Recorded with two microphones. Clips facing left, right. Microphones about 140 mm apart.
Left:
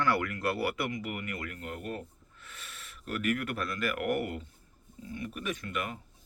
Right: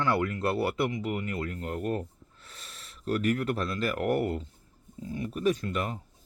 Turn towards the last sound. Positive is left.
turn(degrees=-35)  # may be behind; listen again after turning